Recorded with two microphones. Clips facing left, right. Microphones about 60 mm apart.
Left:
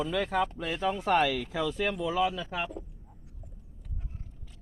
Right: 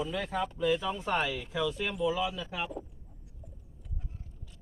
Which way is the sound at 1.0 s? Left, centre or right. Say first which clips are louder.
Left 5 dB; left.